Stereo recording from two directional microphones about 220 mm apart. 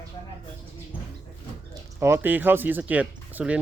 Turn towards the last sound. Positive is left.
turn(degrees=-5)  # may be behind; listen again after turning